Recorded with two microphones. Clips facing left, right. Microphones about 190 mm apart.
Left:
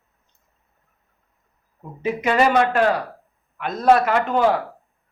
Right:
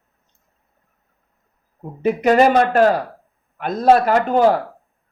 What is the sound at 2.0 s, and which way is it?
A man's voice, 50° right (ahead or behind).